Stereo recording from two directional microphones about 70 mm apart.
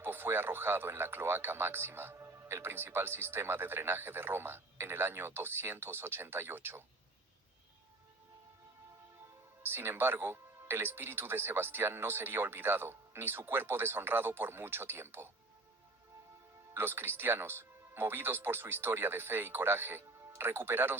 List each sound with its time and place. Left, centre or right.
0.0 s speech: right
9.6 s speech: right
16.7 s speech: right